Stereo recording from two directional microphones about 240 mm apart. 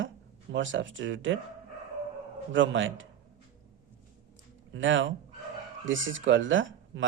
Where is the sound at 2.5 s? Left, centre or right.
Right.